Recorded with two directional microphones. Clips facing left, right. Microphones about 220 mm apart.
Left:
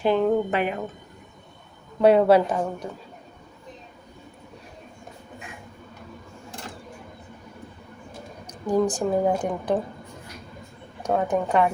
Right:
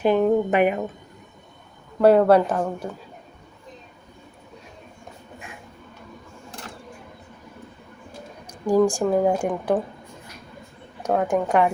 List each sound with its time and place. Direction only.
0.0 s a sound: 15° right (ahead or behind)
2.0 s a woman's voice: centre (ahead or behind)
8.4 s a woman's voice: 10° right (ahead or behind)
11.0 s a woman's voice: 10° right (ahead or behind)